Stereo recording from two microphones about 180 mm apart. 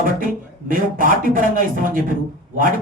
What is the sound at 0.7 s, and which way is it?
Speech, 50° right (ahead or behind).